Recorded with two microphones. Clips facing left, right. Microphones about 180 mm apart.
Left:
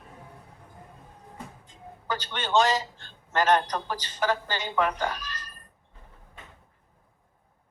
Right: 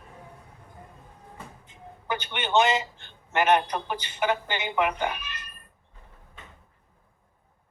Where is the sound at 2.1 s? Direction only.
15° right (ahead or behind).